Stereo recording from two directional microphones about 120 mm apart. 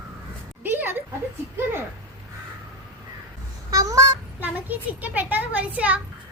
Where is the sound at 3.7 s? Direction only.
30° right (ahead or behind).